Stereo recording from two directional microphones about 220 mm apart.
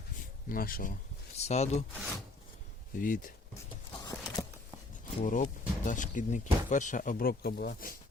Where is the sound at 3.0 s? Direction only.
40° left (ahead or behind).